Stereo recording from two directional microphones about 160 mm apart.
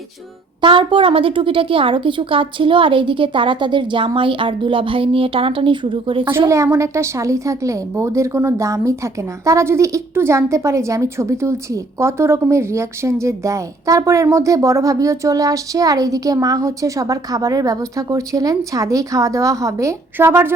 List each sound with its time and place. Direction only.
0.6 s a woman's voice: 30° right (ahead or behind)
6.5 s a woman's voice: 20° right (ahead or behind)